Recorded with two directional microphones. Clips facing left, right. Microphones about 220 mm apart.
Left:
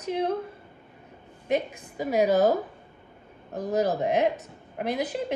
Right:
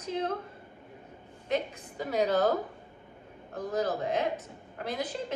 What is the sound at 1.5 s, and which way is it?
A woman's voice, 10° left (ahead or behind).